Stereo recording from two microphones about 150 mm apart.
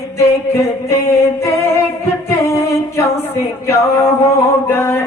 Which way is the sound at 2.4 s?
20° left (ahead or behind).